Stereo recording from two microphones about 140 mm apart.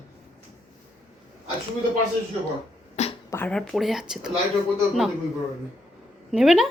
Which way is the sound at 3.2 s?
15° left (ahead or behind).